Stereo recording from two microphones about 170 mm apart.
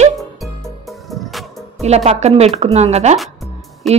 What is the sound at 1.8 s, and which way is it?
A woman's voice, 40° right (ahead or behind).